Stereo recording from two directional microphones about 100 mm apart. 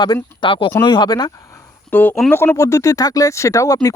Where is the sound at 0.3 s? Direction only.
55° left (ahead or behind).